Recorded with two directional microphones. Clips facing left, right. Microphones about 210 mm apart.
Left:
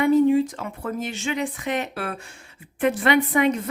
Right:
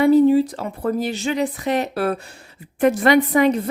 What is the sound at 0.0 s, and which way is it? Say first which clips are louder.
Speech: right 4 dB; 35° right (ahead or behind).